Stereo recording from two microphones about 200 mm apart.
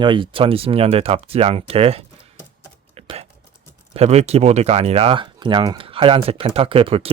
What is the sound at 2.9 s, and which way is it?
Typing, 30° right (ahead or behind).